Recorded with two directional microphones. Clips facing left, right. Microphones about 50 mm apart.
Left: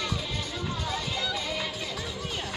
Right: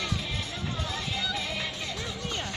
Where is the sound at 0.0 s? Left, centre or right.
Centre.